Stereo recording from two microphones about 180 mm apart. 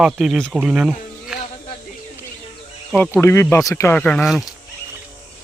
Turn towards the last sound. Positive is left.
turn(degrees=0)  # may be behind; listen again after turning